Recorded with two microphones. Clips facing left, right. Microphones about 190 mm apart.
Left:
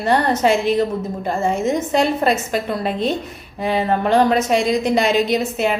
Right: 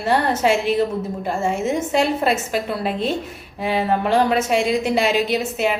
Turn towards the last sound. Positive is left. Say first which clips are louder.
# left 2 dB
turn(degrees=-5)  # may be behind; listen again after turning